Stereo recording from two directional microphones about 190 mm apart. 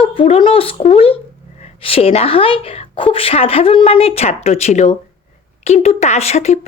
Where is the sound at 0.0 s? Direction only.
30° left (ahead or behind).